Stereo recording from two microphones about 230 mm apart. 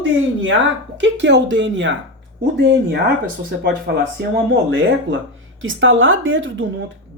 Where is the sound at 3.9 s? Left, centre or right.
Right.